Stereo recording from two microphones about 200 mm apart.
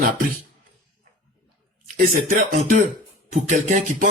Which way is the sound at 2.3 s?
45° right (ahead or behind).